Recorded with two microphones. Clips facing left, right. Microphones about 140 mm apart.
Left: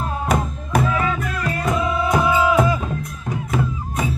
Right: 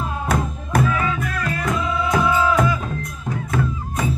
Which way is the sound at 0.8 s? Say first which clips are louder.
Left 1 dB; 25° left (ahead or behind).